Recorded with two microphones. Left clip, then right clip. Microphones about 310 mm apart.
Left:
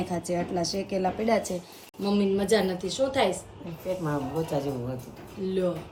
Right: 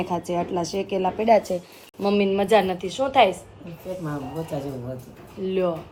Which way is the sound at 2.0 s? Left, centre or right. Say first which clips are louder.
Right 5 dB; centre.